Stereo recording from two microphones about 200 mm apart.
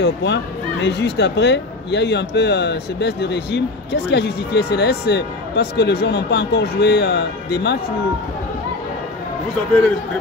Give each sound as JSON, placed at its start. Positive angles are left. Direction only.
{"t": 0.0, "sound": "speech", "side_deg": 60}